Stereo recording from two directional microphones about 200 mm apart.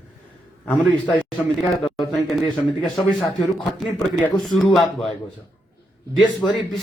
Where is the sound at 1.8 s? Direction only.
Centre (ahead or behind).